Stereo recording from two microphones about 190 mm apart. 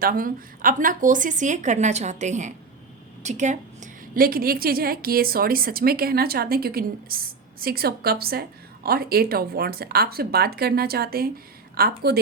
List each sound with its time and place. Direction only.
0.0 s a woman's voice: 45° right (ahead or behind)